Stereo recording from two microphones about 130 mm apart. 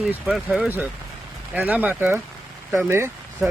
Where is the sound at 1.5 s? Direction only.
10° right (ahead or behind).